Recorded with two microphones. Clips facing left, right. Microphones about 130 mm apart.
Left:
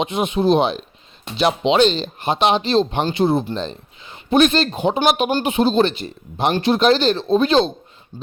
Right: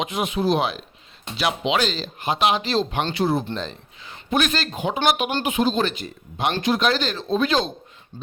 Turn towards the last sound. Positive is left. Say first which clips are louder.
# left 6 dB
turn(degrees=30)  # may be behind; listen again after turning